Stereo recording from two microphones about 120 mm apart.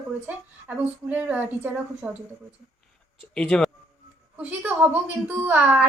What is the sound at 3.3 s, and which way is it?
Speech, 5° left (ahead or behind).